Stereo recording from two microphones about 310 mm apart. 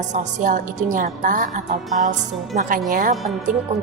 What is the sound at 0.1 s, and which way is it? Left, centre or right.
A woman's voice, right.